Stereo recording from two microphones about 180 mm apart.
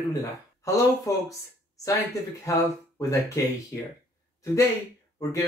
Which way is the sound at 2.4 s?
20° left (ahead or behind).